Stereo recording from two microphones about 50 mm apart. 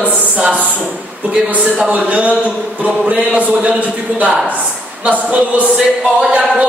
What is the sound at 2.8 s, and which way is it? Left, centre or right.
Music, right.